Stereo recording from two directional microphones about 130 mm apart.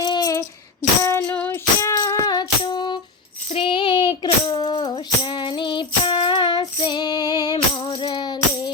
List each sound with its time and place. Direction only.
0.0 s child singing: 30° left (ahead or behind)
1.0 s music: 15° left (ahead or behind)
1.8 s music: 25° left (ahead or behind)
3.5 s child singing: 40° left (ahead or behind)
4.5 s music: 35° left (ahead or behind)